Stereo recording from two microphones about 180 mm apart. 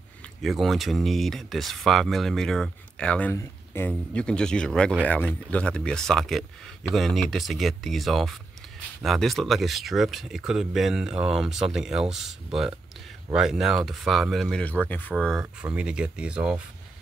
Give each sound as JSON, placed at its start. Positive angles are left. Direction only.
{"t": 0.2, "sound": "speech", "side_deg": 0}